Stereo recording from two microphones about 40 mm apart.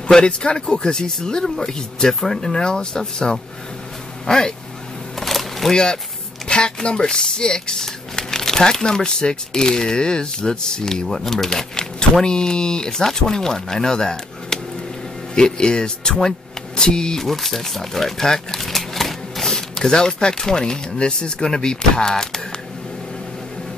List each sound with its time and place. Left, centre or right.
0.1 s speech: left
5.2 s a sound: centre
5.7 s speech: centre
11.1 s speech: centre
17.2 s speech: centre
19.8 s speech: centre